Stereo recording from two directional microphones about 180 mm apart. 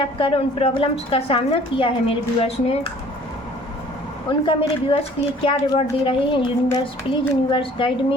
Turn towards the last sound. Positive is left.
turn(degrees=30)  # may be behind; listen again after turning